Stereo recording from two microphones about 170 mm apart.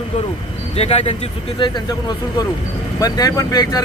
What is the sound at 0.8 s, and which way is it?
Speech, 35° left (ahead or behind).